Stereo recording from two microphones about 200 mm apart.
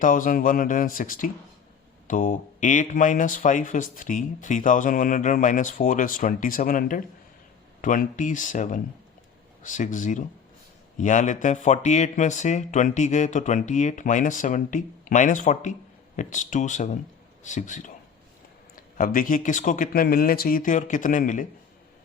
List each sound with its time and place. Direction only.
0.0 s speech: 40° left (ahead or behind)